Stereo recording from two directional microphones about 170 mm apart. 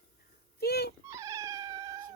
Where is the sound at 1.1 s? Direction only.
20° right (ahead or behind).